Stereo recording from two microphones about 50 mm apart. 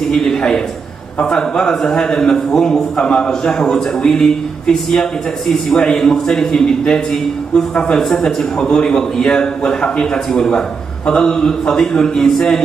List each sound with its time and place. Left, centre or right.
0.1 s a man's voice: centre
5.7 s a man's voice: centre